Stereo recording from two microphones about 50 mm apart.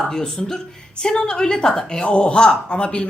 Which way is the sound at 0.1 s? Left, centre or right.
Centre.